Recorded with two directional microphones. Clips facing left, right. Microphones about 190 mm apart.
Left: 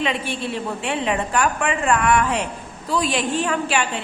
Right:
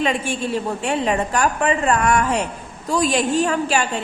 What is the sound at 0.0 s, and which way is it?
A woman's voice, 45° right (ahead or behind).